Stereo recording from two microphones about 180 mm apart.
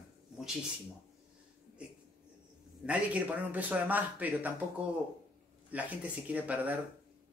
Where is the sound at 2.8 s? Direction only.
10° right (ahead or behind).